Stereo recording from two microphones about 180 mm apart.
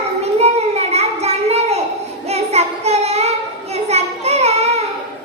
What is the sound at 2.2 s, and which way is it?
Child singing, 35° right (ahead or behind).